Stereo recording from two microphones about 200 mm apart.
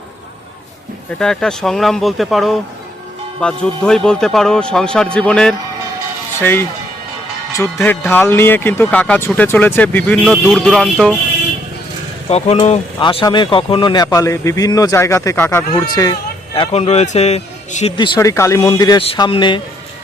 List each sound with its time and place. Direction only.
1.2 s a man's voice: 5° left (ahead or behind)
12.3 s speech: 30° left (ahead or behind); by 15.8 s 15° left (ahead or behind)
16.6 s a man's voice: 30° left (ahead or behind)
17.9 s speech: 25° left (ahead or behind)